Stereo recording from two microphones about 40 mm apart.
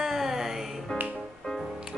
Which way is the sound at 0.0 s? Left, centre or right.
Centre.